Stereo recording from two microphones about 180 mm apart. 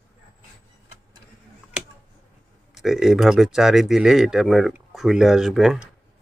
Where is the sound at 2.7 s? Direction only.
Centre (ahead or behind).